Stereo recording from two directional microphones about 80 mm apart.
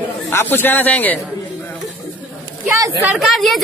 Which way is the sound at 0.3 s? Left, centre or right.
Left.